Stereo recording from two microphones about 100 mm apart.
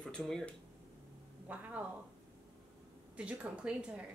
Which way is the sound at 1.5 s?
15° right (ahead or behind).